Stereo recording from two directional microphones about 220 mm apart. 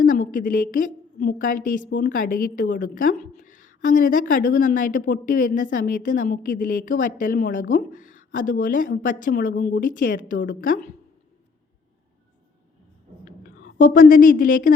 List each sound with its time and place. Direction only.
0.0 s a woman's voice: 40° left (ahead or behind)
13.4 s a woman's voice: 40° left (ahead or behind)